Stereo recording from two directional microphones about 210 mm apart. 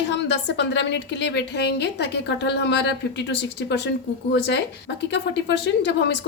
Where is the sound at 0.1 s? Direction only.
55° left (ahead or behind).